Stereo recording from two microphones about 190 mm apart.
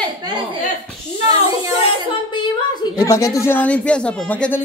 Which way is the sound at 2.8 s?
20° left (ahead or behind).